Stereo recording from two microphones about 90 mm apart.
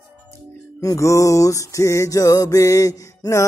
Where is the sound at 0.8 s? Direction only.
40° left (ahead or behind).